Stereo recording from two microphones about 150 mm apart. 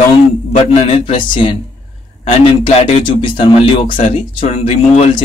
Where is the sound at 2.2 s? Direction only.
45° left (ahead or behind).